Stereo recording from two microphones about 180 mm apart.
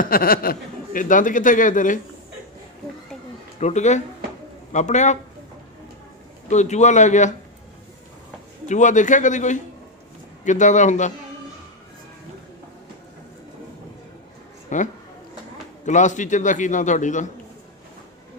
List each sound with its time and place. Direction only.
0.0 s a man's voice: 55° left (ahead or behind)
3.5 s a man's voice: 40° left (ahead or behind)
6.5 s a man's voice: 40° left (ahead or behind)
8.6 s a man's voice: 45° left (ahead or behind)
14.7 s a man's voice: 45° left (ahead or behind)